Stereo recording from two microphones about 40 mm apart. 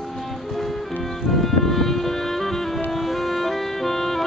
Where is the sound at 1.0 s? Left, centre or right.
Centre.